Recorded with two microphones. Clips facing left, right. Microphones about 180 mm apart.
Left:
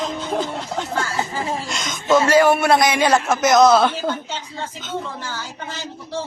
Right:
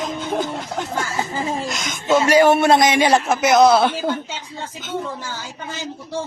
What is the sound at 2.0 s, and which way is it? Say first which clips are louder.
A man's voice: right 1 dB; 20° right (ahead or behind).